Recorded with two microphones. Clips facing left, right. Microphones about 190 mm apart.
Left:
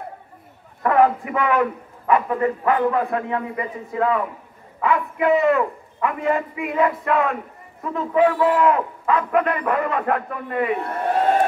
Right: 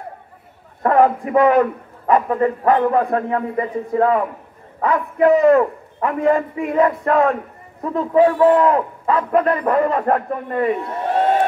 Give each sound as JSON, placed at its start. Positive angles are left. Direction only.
{"t": 0.8, "sound": "a man's voice", "side_deg": -35}